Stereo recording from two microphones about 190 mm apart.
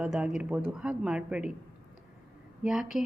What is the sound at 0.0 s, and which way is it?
A woman's voice, 5° right (ahead or behind).